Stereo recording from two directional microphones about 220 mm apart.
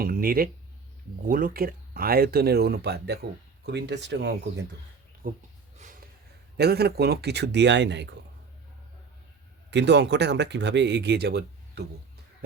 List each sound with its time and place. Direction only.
0.0 s speech: 40° right (ahead or behind)
5.2 s speech: 40° right (ahead or behind)
6.6 s speech: 45° right (ahead or behind)
9.6 s speech: 50° right (ahead or behind)